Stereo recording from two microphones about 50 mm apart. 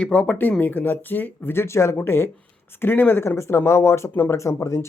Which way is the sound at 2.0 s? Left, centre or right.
Left.